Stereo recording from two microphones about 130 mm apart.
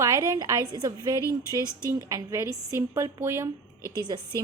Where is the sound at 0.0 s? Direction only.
25° right (ahead or behind).